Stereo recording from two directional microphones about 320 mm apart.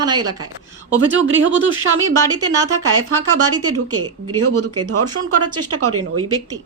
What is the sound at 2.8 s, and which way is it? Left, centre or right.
Speech, right.